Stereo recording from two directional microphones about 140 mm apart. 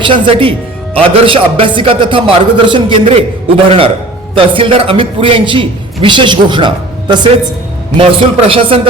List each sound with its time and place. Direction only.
0.0 s a man's voice: 40° right (ahead or behind)